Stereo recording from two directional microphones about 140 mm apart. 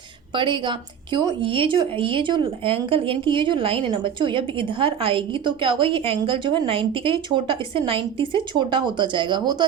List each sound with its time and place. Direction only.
0.3 s speech: 35° right (ahead or behind)